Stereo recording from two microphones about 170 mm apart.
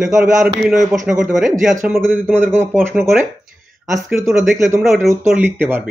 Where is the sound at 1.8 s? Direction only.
15° right (ahead or behind).